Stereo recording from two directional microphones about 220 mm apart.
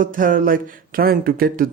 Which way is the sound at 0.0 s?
40° right (ahead or behind).